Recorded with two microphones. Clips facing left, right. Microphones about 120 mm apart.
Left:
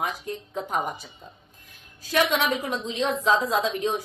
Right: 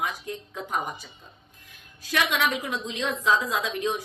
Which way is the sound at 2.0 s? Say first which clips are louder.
Left 3 dB; 35° left (ahead or behind).